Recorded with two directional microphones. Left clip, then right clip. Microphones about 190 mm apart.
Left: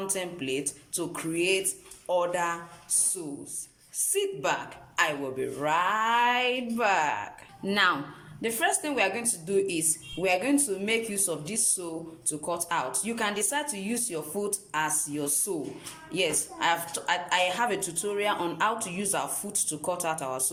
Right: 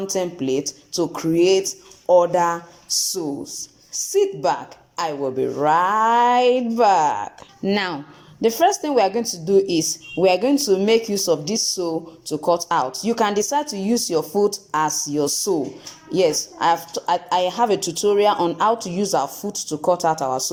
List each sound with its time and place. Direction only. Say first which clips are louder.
0.1 s a woman's voice: right 9 dB; 25° right (ahead or behind)
3.9 s a woman's voice: right 10 dB; 25° right (ahead or behind)
16.6 s a woman's voice: right 6 dB; 30° right (ahead or behind)